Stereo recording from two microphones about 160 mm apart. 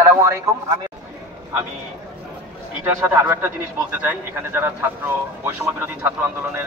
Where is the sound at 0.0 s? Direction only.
20° right (ahead or behind).